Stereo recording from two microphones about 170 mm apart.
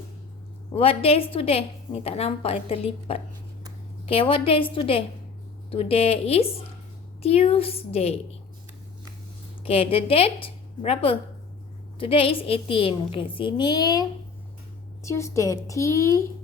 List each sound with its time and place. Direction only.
0.7 s a woman's voice: 35° left (ahead or behind)
9.6 s a woman's voice: 35° left (ahead or behind); by 16.2 s 20° left (ahead or behind)